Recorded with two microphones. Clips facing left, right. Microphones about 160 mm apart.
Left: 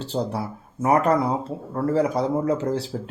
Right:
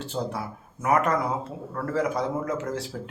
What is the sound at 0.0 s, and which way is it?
Speech, 35° left (ahead or behind).